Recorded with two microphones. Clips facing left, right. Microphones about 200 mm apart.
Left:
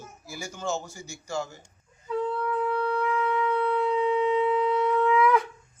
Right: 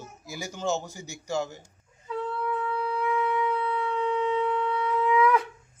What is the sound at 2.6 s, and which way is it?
Shofar, 5° right (ahead or behind).